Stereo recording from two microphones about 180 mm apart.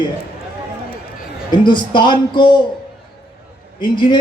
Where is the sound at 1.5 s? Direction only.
25° left (ahead or behind).